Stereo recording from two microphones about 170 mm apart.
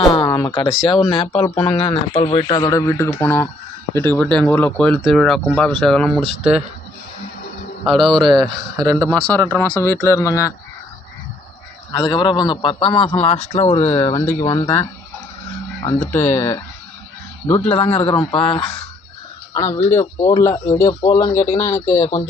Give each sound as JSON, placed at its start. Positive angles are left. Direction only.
{"t": 0.1, "sound": "speech", "side_deg": 20}
{"t": 1.5, "sound": "speech", "side_deg": 10}
{"t": 1.8, "sound": "speech", "side_deg": 35}
{"t": 7.9, "sound": "speech", "side_deg": 0}
{"t": 11.9, "sound": "speech", "side_deg": 25}
{"t": 14.0, "sound": "speech", "side_deg": 20}
{"t": 15.8, "sound": "speech", "side_deg": 15}
{"t": 17.9, "sound": "speech", "side_deg": 30}
{"t": 19.5, "sound": "speech", "side_deg": 20}